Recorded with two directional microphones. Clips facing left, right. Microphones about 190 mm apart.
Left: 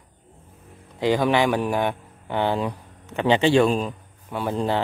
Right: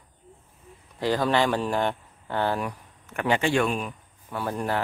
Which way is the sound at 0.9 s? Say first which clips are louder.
Left 3 dB; 15° left (ahead or behind).